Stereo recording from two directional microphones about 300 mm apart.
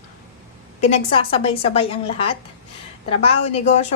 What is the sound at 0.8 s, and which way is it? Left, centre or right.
A woman's voice, centre.